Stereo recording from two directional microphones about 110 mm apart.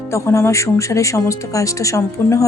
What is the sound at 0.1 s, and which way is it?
Speech, 25° left (ahead or behind).